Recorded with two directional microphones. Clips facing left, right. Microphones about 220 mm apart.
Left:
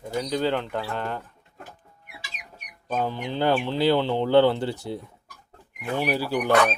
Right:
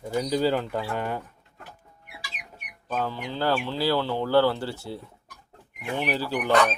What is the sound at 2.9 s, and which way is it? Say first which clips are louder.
Speech: left 2 dB; 20° left (ahead or behind).